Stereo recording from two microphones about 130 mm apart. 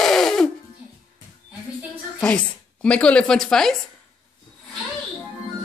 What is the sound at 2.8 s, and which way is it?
Speech, 10° left (ahead or behind).